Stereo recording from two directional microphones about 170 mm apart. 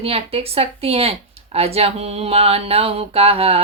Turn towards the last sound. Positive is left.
turn(degrees=-35)  # may be behind; listen again after turning